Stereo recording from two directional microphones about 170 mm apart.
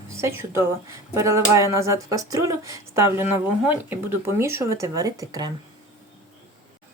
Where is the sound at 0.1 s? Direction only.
15° right (ahead or behind).